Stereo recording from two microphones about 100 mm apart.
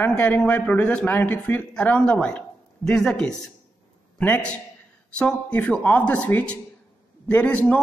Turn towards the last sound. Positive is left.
turn(degrees=10)  # may be behind; listen again after turning